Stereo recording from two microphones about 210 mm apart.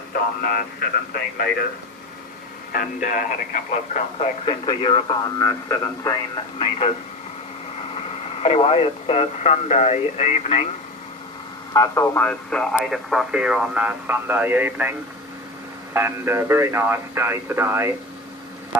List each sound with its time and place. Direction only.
0.1 s speech: 45° left (ahead or behind)
2.7 s speech: 40° left (ahead or behind); by 6.4 s 15° left (ahead or behind)
6.6 s speech: 30° left (ahead or behind)
7.9 s speech: 30° left (ahead or behind)
11.7 s speech: 15° left (ahead or behind); by 17.9 s 10° right (ahead or behind)